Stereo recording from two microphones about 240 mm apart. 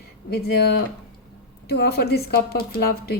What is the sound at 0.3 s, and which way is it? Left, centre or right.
A woman's voice, left.